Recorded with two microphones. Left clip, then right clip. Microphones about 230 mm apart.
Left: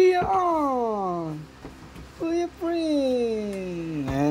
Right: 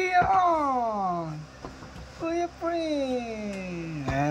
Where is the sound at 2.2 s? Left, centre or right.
Left.